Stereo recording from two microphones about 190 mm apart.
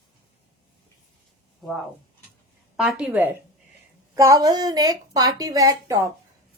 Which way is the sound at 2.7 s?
5° right (ahead or behind).